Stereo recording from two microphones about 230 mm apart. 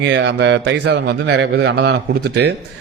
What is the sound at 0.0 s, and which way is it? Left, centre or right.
Speech, right.